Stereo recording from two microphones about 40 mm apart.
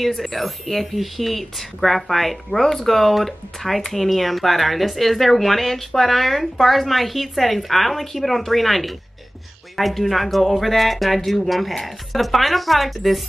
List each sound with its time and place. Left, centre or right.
0.0 s speech: centre